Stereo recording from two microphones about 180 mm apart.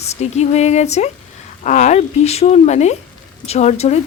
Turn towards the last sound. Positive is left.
turn(degrees=40)  # may be behind; listen again after turning